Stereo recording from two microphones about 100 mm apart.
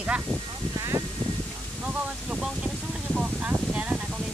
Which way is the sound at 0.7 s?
35° right (ahead or behind).